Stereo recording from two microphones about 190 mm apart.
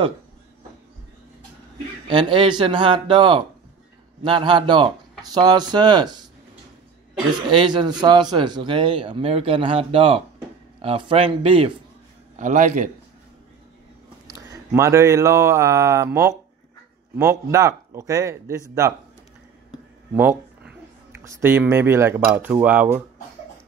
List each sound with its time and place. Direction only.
2.0 s a man's voice: 25° right (ahead or behind)
7.4 s a man's voice: 25° right (ahead or behind)
12.4 s a man's voice: 40° right (ahead or behind)
14.2 s speech: 15° right (ahead or behind)
20.2 s a sound: 10° right (ahead or behind)
21.2 s speech: 15° right (ahead or behind)